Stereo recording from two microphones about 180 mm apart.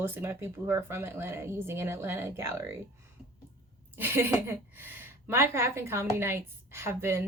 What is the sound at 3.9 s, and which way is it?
Speech, 10° right (ahead or behind).